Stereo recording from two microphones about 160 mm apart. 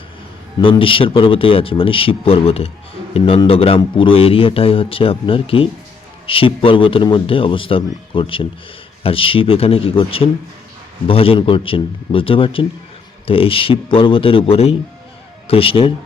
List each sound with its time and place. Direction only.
0.6 s a man's voice: 35° left (ahead or behind)